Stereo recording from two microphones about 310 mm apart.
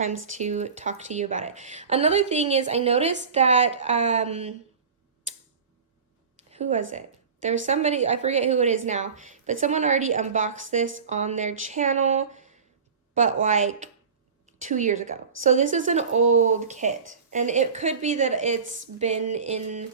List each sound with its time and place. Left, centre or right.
0.3 s a woman's voice: right
6.5 s a woman's voice: right